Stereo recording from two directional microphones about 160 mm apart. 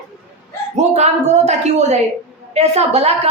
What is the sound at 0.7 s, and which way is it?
A woman's voice, 45° right (ahead or behind).